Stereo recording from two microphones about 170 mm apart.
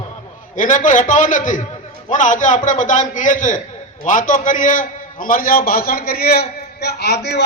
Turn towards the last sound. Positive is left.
turn(degrees=75)  # may be behind; listen again after turning